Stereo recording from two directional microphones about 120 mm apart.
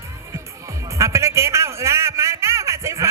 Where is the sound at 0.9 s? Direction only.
25° right (ahead or behind).